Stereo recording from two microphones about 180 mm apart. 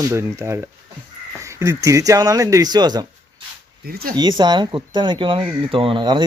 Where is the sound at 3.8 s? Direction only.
55° right (ahead or behind).